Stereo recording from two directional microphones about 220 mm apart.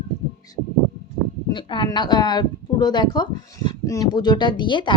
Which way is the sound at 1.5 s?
20° left (ahead or behind).